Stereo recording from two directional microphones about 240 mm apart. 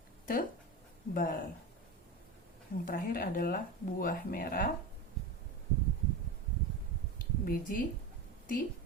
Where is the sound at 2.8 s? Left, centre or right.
Left.